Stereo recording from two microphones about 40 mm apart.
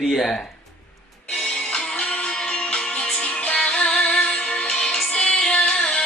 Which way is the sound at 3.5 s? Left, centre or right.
Left.